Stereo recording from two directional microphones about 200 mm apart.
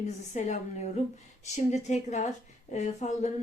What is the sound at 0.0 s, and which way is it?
Speech, 35° left (ahead or behind).